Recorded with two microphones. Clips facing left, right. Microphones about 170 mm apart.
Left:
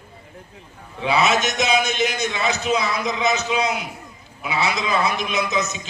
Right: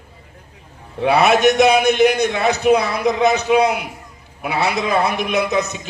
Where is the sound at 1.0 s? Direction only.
60° right (ahead or behind).